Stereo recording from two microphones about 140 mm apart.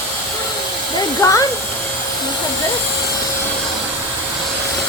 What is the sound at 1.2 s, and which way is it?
Speech, 25° left (ahead or behind).